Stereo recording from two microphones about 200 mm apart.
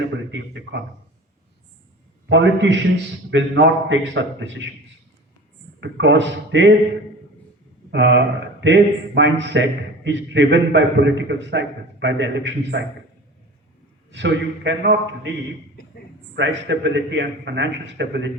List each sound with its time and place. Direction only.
0.0 s speech: 65° right (ahead or behind)
2.3 s speech: 65° right (ahead or behind)
5.8 s speech: 65° right (ahead or behind)
7.9 s speech: 60° right (ahead or behind)
14.1 s speech: 65° right (ahead or behind)
16.3 s speech: 60° right (ahead or behind)